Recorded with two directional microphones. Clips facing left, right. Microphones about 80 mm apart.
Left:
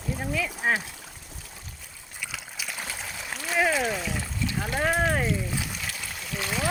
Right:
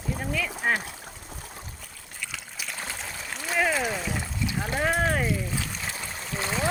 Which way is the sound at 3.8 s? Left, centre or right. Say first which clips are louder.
Even; centre.